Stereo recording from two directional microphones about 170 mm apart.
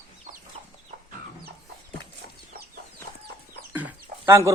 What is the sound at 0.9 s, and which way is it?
Chicken, 50° right (ahead or behind).